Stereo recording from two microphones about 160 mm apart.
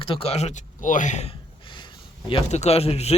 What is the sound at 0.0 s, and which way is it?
Speech, 35° left (ahead or behind).